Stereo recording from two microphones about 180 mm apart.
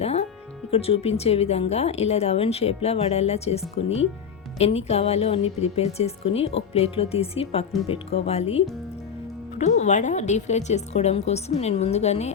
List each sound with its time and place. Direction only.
0.0 s music: 35° left (ahead or behind)
0.7 s speech: 35° left (ahead or behind)